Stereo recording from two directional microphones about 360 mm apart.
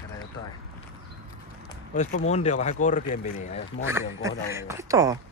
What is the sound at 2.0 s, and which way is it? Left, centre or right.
Speech, centre.